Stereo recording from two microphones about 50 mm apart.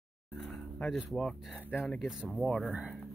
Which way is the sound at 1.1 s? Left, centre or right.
Centre.